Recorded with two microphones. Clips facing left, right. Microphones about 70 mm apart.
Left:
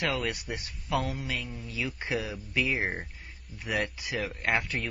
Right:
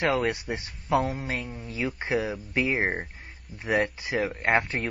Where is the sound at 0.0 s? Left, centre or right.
Right.